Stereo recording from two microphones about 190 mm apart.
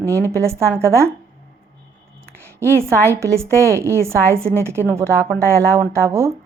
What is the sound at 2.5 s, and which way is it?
A woman's voice, 15° right (ahead or behind).